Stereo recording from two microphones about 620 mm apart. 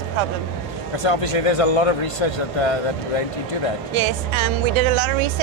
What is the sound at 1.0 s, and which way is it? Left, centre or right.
A man's voice, left.